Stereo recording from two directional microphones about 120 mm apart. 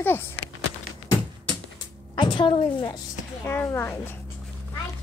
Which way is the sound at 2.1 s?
45° left (ahead or behind).